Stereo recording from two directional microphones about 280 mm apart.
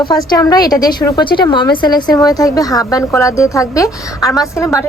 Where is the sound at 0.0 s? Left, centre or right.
Centre.